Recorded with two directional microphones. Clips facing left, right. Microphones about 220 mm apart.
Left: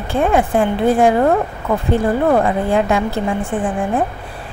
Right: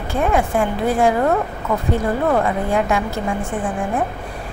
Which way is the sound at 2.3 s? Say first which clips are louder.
Left 2 dB; 30° left (ahead or behind).